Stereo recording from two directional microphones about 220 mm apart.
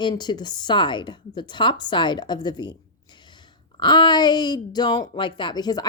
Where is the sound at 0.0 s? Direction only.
20° left (ahead or behind).